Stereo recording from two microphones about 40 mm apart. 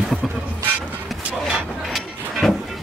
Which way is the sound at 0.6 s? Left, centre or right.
Right.